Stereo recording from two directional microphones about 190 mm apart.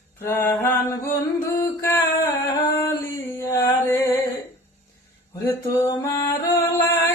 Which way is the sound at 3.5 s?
15° left (ahead or behind).